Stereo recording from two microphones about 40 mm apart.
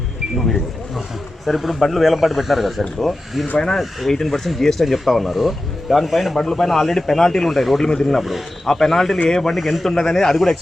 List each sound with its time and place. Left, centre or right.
0.3 s a man's voice: centre
6.3 s a man's voice: centre